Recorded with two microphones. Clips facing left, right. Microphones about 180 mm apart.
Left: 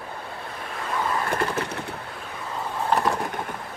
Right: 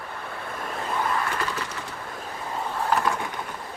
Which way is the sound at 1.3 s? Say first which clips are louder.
Left 4 dB; 50° left (ahead or behind).